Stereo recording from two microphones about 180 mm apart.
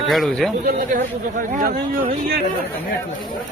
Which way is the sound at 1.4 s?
50° right (ahead or behind).